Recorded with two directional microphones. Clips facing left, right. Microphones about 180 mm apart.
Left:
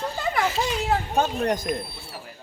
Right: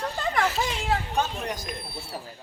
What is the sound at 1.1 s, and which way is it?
Speech, 55° left (ahead or behind).